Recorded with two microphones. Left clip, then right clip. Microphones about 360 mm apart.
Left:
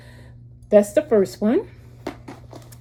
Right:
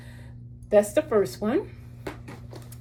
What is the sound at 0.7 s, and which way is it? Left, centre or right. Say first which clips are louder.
Speech: left 5 dB; left.